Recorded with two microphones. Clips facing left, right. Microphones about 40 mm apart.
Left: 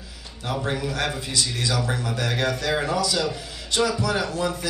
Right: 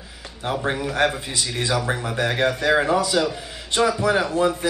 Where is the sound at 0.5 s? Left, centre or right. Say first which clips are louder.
Right 2 dB; right.